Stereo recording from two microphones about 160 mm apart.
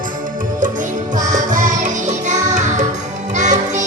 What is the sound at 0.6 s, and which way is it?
Music, 55° right (ahead or behind).